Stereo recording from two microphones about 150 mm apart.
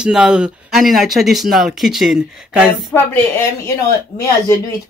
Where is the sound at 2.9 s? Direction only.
15° left (ahead or behind).